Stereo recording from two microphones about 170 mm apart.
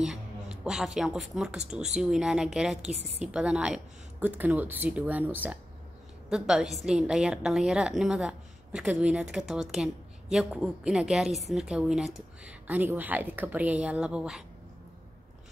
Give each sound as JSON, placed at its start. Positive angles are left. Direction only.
{"t": 0.0, "sound": "a woman's voice", "side_deg": -5}